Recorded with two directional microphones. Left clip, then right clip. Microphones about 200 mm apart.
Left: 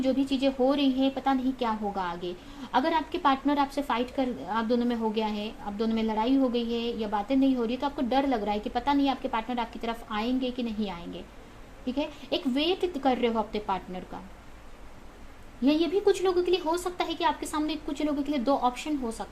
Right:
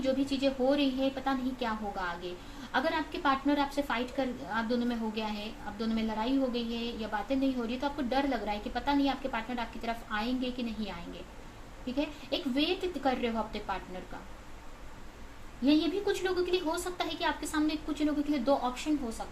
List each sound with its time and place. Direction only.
0.0 s a woman's voice: 50° left (ahead or behind)
11.9 s a woman's voice: 50° left (ahead or behind)
15.6 s a woman's voice: 50° left (ahead or behind)